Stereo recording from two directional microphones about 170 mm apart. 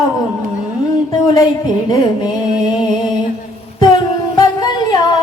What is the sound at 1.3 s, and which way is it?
Music, 25° left (ahead or behind).